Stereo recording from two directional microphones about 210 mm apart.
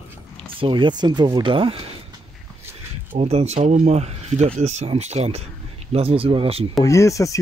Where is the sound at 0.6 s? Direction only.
25° right (ahead or behind).